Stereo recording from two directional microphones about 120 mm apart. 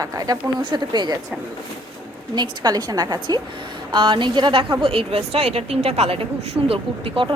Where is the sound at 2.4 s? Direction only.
35° right (ahead or behind).